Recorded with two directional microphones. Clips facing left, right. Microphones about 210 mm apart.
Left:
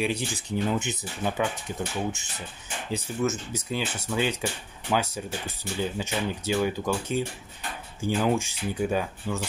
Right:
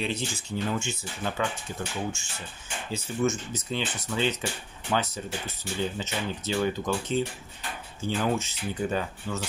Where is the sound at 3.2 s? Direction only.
5° left (ahead or behind).